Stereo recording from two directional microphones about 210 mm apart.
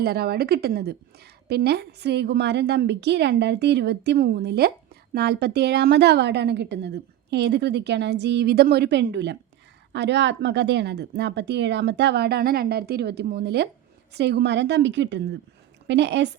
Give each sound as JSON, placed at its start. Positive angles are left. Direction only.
{"t": 0.0, "sound": "a woman's voice", "side_deg": -50}